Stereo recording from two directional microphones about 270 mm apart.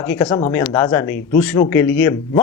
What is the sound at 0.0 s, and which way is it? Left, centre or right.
A man's voice, centre.